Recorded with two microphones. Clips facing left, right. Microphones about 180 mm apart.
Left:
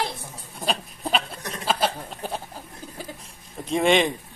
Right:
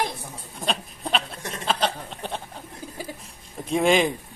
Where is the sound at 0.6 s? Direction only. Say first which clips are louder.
Left 1 dB; centre (ahead or behind).